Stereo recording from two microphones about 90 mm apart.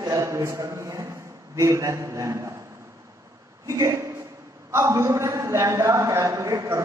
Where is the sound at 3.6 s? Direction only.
35° right (ahead or behind).